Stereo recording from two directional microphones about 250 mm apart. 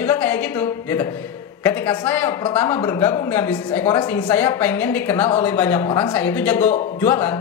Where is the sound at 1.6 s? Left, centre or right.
Centre.